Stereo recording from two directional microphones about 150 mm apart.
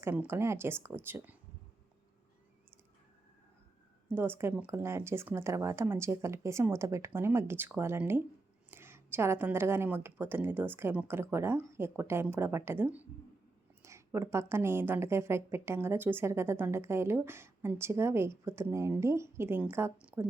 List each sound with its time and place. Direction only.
0.0 s a woman's voice: 15° right (ahead or behind)
4.1 s a woman's voice: 15° right (ahead or behind)
13.8 s a sound: 20° right (ahead or behind)
14.4 s a woman's voice: 15° right (ahead or behind)